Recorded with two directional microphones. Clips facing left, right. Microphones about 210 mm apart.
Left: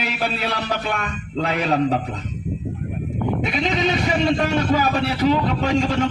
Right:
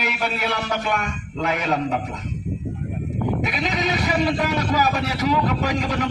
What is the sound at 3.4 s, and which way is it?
Speech, 25° left (ahead or behind).